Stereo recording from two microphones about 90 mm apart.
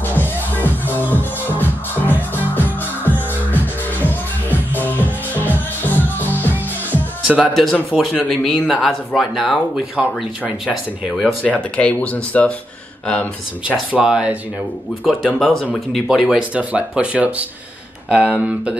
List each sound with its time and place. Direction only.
0.1 s music: 20° left (ahead or behind)
7.2 s speech: 10° right (ahead or behind)
11.2 s speech: 15° left (ahead or behind)
13.7 s speech: 10° right (ahead or behind)
16.2 s speech: 10° right (ahead or behind)